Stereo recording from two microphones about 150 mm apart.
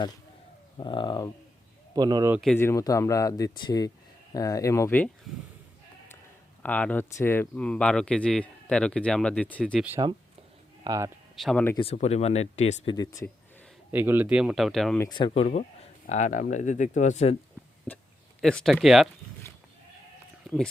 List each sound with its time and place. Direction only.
0.8 s speech: 30° left (ahead or behind)
2.0 s speech: 25° right (ahead or behind)
2.6 s speech: 20° left (ahead or behind)
5.3 s speech: centre (ahead or behind)
6.6 s speech: 10° left (ahead or behind)
10.0 s speech: 30° right (ahead or behind)
11.3 s speech: centre (ahead or behind)
11.9 s speech: 45° left (ahead or behind)
12.9 s speech: 25° left (ahead or behind)
13.9 s speech: 15° right (ahead or behind)
15.1 s speech: 30° left (ahead or behind)
16.0 s speech: 55° left (ahead or behind)
17.8 s a sound: 10° left (ahead or behind)
20.4 s a sound: centre (ahead or behind)